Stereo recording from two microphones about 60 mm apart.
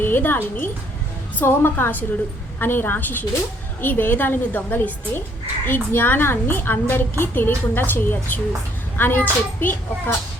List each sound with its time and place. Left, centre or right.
0.0 s a woman's voice: left